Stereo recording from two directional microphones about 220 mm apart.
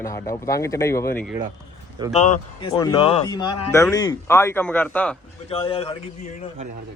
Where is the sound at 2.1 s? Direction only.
30° left (ahead or behind); by 5.2 s 5° left (ahead or behind).